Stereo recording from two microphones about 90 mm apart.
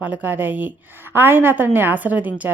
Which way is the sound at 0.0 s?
20° right (ahead or behind).